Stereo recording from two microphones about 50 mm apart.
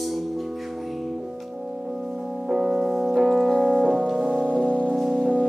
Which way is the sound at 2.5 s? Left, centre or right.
Centre.